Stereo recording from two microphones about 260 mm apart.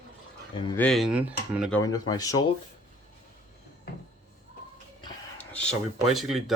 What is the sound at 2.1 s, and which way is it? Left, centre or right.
Speech, centre.